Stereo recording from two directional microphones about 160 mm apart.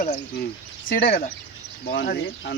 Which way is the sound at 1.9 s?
80° left.